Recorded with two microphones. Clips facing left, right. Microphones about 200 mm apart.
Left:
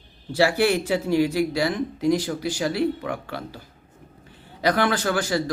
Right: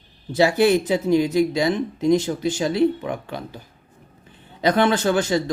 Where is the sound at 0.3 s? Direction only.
20° right (ahead or behind).